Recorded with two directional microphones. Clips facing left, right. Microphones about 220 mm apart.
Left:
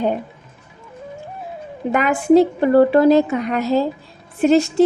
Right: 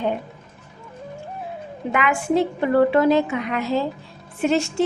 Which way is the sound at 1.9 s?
40° left (ahead or behind).